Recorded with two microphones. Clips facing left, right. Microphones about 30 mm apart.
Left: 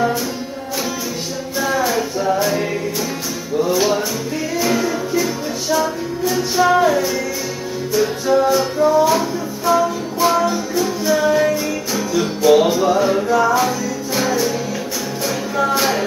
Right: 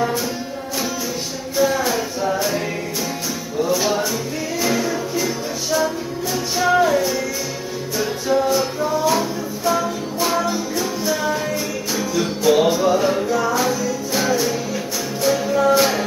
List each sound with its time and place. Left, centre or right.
1.6 s music: centre
4.6 s music: centre
11.9 s music: centre
13.3 s music: centre
13.6 s music: centre